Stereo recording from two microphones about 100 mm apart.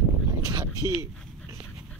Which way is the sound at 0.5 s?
40° right (ahead or behind).